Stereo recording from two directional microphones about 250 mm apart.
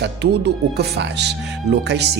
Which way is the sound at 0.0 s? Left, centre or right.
Right.